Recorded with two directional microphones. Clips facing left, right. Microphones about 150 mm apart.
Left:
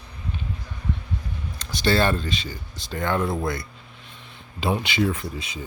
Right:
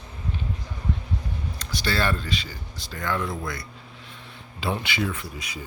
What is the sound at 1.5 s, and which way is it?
Speech, 25° left (ahead or behind).